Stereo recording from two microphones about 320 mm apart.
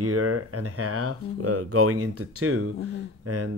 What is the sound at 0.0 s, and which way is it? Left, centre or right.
Speech, right.